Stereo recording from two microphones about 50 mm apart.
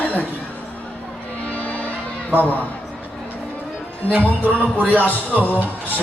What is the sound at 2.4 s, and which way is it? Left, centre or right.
Speech, left.